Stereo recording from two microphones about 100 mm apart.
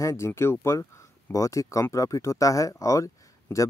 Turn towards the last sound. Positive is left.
turn(degrees=30)  # may be behind; listen again after turning